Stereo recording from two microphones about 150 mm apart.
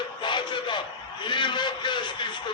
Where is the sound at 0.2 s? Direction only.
30° left (ahead or behind).